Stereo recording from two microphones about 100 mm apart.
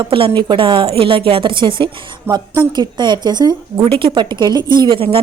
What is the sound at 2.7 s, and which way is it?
Speech, 45° right (ahead or behind).